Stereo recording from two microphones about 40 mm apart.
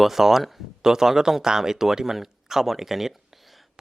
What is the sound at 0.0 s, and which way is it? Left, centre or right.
Speech, centre.